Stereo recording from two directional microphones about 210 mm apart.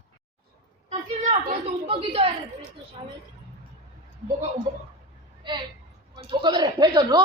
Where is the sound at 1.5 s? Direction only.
25° right (ahead or behind).